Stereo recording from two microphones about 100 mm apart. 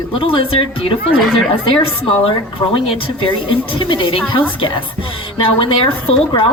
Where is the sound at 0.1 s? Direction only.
65° left (ahead or behind).